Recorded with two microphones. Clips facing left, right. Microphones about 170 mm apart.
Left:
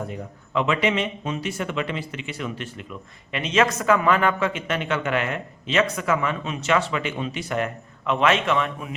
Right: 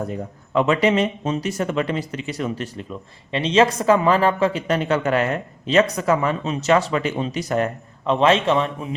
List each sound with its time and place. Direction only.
0.1 s speech: 40° right (ahead or behind)